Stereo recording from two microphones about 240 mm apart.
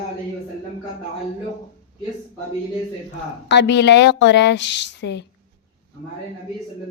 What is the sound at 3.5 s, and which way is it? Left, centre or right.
A woman's voice, left.